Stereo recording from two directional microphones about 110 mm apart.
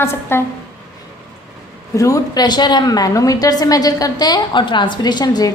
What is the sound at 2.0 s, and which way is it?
A woman's voice, 30° left (ahead or behind).